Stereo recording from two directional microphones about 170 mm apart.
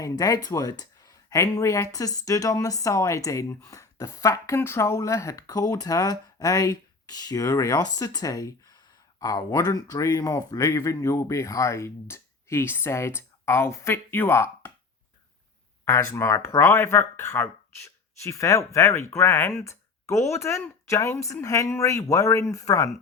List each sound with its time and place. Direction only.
0.0 s speech: 20° left (ahead or behind)
15.8 s speech: 15° left (ahead or behind)